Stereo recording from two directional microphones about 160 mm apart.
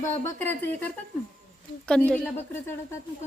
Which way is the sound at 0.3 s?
10° left (ahead or behind).